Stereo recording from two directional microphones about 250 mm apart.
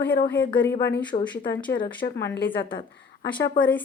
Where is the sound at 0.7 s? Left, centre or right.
Left.